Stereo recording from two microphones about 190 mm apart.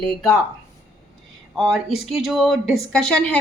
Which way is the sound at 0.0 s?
Centre (ahead or behind).